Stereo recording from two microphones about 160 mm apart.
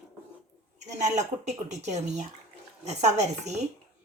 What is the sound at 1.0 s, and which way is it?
A woman's voice, 45° right (ahead or behind).